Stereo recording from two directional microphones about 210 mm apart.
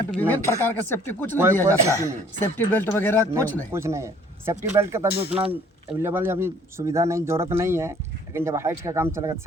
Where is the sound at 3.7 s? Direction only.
15° right (ahead or behind).